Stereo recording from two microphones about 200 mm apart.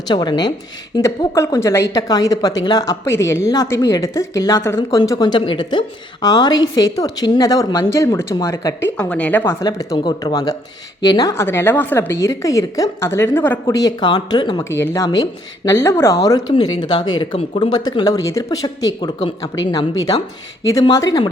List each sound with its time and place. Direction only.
0.1 s a woman's voice: 20° left (ahead or behind)
20.7 s speech: 15° left (ahead or behind)